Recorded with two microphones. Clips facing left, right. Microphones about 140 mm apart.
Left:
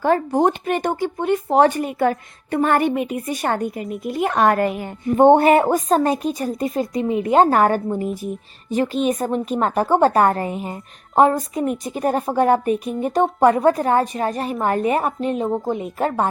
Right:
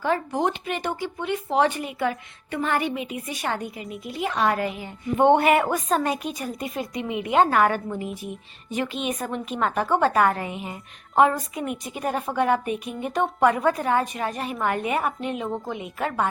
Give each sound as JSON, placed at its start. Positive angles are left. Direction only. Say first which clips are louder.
{"t": 0.0, "sound": "a woman's voice", "louder": "left 7 dB", "side_deg": 40}
{"t": 15.4, "sound": "a woman's voice", "louder": "left 7 dB", "side_deg": 20}
{"t": 15.7, "sound": "a woman's voice", "louder": "left 6 dB", "side_deg": 40}